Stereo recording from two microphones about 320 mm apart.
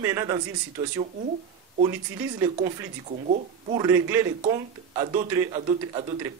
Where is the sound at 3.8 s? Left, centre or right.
Centre.